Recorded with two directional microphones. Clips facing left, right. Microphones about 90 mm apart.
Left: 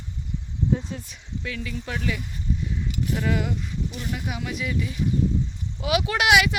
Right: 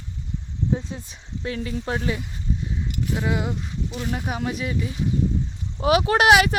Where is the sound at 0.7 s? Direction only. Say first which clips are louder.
Even; 25° right (ahead or behind).